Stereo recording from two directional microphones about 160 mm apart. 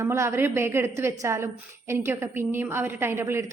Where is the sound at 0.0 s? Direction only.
15° right (ahead or behind).